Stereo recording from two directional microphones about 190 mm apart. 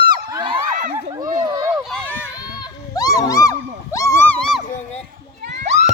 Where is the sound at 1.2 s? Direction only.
40° right (ahead or behind).